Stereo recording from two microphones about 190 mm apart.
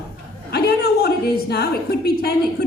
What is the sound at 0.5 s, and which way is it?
A woman's voice, 55° left (ahead or behind).